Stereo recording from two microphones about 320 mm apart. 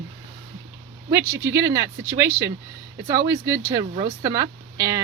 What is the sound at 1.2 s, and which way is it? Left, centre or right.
Speech, right.